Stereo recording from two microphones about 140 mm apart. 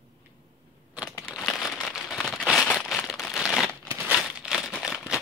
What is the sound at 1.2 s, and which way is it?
Crumpling, 5° left (ahead or behind).